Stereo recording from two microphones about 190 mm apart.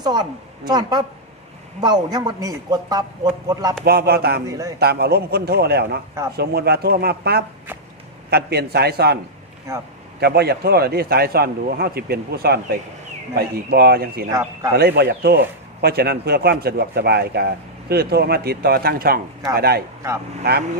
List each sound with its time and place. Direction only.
0.0 s a man's voice: 20° right (ahead or behind)
3.8 s speech: 55° right (ahead or behind)
4.4 s a man's voice: 15° right (ahead or behind)
4.8 s speech: 55° right (ahead or behind)
10.2 s speech: 60° right (ahead or behind)